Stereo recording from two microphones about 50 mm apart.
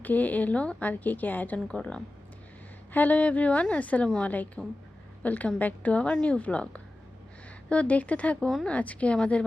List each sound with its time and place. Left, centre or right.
0.0 s a woman's voice: left
1.6 s a woman's voice: left
2.9 s a woman's voice: left